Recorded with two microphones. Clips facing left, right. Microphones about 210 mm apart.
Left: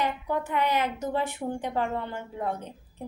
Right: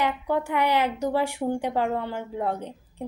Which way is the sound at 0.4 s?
10° right (ahead or behind).